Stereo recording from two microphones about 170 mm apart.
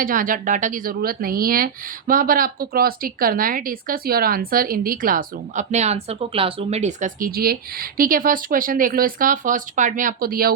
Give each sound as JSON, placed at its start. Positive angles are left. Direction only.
{"t": 0.0, "sound": "speech", "side_deg": -55}